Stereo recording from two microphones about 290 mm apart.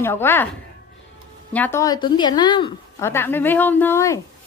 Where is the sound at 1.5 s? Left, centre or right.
Centre.